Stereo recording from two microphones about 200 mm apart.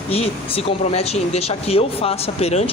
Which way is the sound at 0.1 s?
30° left (ahead or behind).